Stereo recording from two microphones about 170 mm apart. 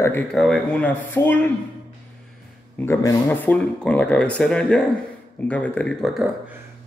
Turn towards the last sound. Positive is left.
turn(degrees=0)  # may be behind; listen again after turning